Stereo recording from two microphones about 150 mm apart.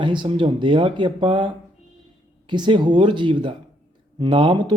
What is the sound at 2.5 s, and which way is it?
A man's voice, 30° right (ahead or behind).